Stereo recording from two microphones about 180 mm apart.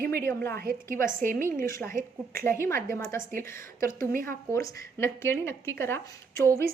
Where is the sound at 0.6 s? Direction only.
55° right (ahead or behind).